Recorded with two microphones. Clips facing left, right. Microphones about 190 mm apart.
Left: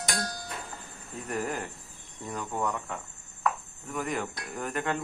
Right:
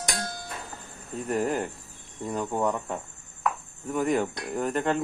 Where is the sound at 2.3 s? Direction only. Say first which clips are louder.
Right 5 dB; 25° right (ahead or behind).